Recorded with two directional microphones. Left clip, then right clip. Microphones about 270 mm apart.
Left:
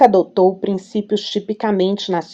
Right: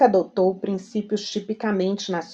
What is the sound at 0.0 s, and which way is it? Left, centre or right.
Speech, left.